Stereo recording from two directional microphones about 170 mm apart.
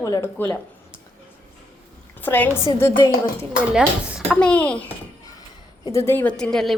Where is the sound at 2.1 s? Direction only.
10° left (ahead or behind).